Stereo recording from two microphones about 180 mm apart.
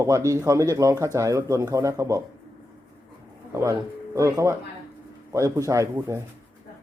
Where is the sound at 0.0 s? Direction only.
15° right (ahead or behind).